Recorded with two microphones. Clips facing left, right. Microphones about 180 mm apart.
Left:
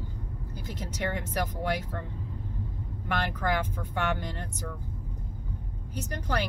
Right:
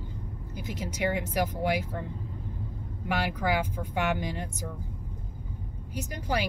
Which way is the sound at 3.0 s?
10° right (ahead or behind).